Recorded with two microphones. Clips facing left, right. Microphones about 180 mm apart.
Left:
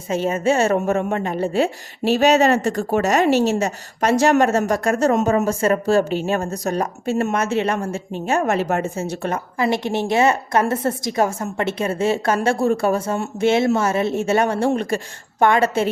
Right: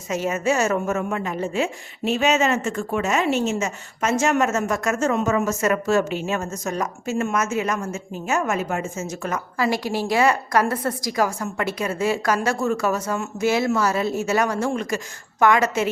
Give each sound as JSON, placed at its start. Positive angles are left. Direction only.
{"t": 0.1, "sound": "a woman's voice", "side_deg": 30}